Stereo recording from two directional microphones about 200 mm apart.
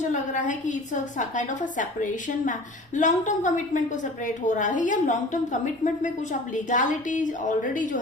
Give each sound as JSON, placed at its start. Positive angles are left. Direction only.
{"t": 0.1, "sound": "a woman's voice", "side_deg": 40}